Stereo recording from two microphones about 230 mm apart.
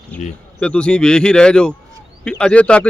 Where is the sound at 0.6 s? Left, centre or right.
Centre.